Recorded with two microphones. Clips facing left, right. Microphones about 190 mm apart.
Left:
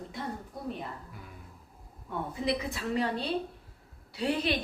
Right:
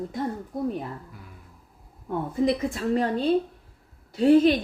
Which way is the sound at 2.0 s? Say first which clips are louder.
Right 8 dB; 45° right (ahead or behind).